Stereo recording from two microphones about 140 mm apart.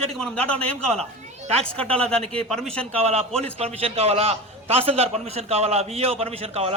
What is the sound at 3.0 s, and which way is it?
A man's voice, 50° right (ahead or behind).